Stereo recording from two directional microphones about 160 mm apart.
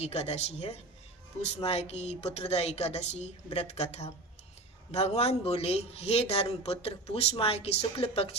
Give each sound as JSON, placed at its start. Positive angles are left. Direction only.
{"t": 0.0, "sound": "a woman's voice", "side_deg": 40}